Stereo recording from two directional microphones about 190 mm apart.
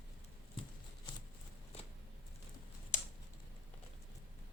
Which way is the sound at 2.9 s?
40° left (ahead or behind).